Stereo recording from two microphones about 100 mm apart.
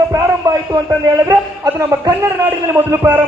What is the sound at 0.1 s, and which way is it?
A man's voice, 35° right (ahead or behind).